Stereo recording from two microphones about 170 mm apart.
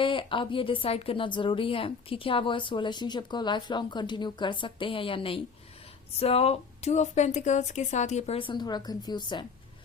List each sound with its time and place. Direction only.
0.0 s a woman's voice: 30° left (ahead or behind)